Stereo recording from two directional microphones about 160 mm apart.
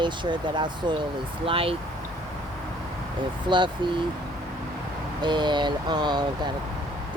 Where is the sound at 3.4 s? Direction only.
30° right (ahead or behind).